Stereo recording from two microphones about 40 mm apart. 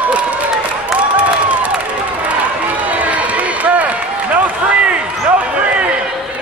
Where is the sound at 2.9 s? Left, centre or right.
Right.